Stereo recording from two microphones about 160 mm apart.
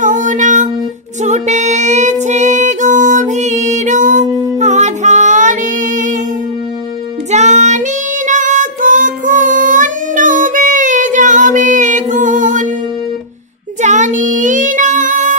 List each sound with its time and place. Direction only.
0.0 s child singing: 55° right (ahead or behind)
1.2 s music: 45° right (ahead or behind)
7.2 s child singing: 45° right (ahead or behind)
13.7 s child singing: 50° right (ahead or behind)